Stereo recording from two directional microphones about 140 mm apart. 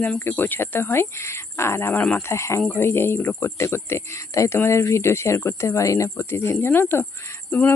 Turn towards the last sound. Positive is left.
turn(degrees=10)  # may be behind; listen again after turning